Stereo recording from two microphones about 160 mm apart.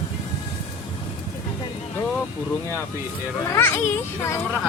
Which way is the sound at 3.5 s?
15° left (ahead or behind).